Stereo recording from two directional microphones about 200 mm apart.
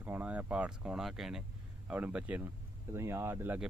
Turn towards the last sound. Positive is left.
turn(degrees=-10)  # may be behind; listen again after turning